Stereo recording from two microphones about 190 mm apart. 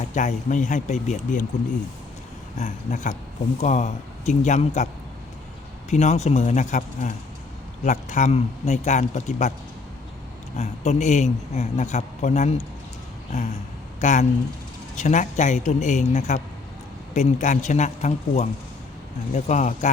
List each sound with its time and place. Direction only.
0.1 s a man's voice: 40° left (ahead or behind)
2.6 s a man's voice: 40° left (ahead or behind)
5.9 s a man's voice: 35° left (ahead or behind)
10.6 s a man's voice: 35° left (ahead or behind)